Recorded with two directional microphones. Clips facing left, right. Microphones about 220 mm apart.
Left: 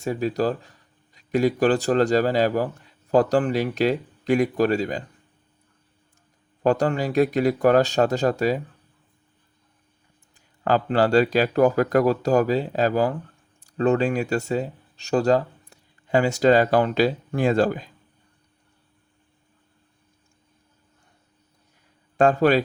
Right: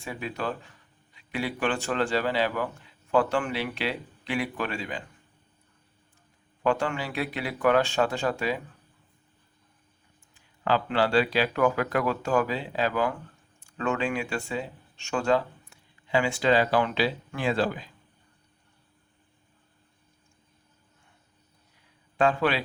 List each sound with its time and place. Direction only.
0.0 s speech: 40° left (ahead or behind)
6.6 s speech: 40° left (ahead or behind)
10.3 s speech: 45° left (ahead or behind)
22.2 s speech: 45° left (ahead or behind)